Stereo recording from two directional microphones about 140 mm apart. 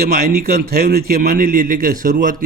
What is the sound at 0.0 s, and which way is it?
A man's voice, 90° right.